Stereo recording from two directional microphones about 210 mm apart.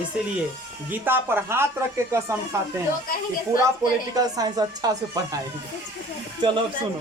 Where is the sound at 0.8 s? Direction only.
10° right (ahead or behind).